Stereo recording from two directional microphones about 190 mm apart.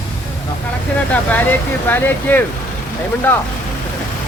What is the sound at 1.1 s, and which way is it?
Speech, 10° left (ahead or behind).